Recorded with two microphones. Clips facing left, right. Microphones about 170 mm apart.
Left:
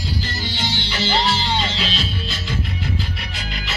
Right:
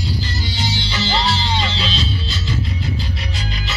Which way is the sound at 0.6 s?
50° left (ahead or behind).